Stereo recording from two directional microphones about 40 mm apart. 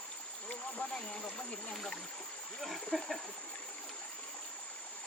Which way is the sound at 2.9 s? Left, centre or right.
Centre.